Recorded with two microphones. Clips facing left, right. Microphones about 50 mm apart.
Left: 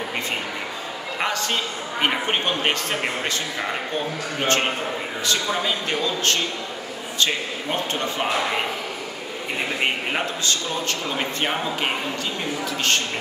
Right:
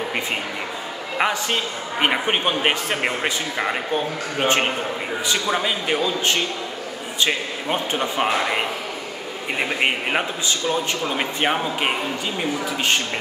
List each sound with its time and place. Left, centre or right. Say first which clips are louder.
1.1 s a man's voice: right 3 dB; centre
9.8 s a man's voice: right 2 dB; centre